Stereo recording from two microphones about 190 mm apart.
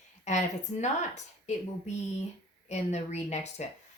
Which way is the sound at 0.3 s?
40° left (ahead or behind).